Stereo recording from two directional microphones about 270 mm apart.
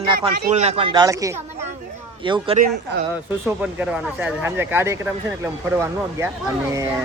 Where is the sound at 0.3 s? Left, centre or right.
Right.